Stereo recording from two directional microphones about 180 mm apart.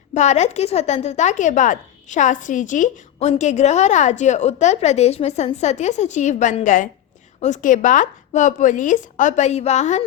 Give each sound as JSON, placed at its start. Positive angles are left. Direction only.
{"t": 0.1, "sound": "a woman's voice", "side_deg": 40}